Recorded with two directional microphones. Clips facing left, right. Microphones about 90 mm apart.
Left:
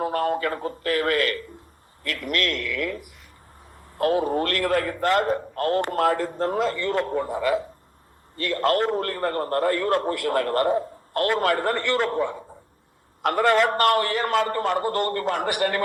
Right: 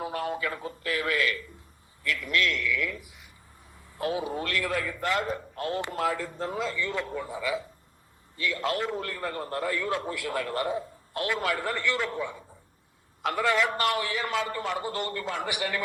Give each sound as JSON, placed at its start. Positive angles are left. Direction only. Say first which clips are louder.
{"t": 0.0, "sound": "a man's voice", "louder": "left 7 dB", "side_deg": 50}